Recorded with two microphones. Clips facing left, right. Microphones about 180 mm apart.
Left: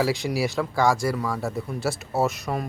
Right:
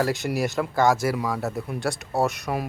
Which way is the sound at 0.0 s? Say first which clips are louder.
Even; centre (ahead or behind).